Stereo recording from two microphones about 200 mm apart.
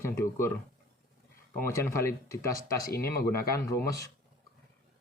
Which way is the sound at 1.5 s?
10° left (ahead or behind).